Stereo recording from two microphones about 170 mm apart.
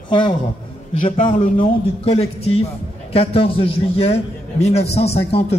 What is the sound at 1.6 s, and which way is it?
A man's voice, 35° left (ahead or behind).